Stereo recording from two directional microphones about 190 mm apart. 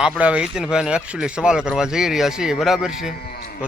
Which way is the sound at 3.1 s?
50° left (ahead or behind).